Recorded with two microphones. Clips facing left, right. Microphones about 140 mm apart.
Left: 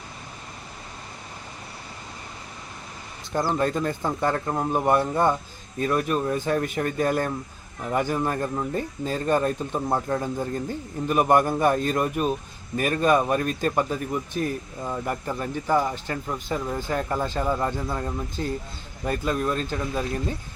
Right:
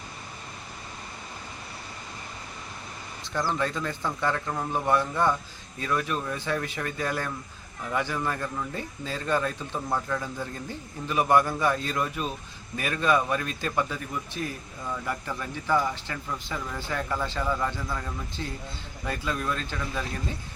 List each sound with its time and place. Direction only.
3.5 s speech: 45° left (ahead or behind)
4.9 s speech: 45° left (ahead or behind)
17.4 s speech: 30° left (ahead or behind)